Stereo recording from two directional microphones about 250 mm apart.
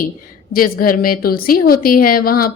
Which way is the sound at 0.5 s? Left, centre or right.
Left.